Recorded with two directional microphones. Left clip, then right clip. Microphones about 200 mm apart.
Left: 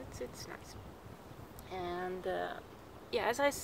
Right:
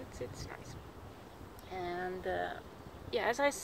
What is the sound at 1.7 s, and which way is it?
Speech, 10° left (ahead or behind).